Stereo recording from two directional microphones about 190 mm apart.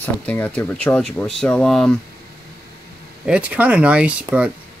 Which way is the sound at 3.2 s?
5° right (ahead or behind).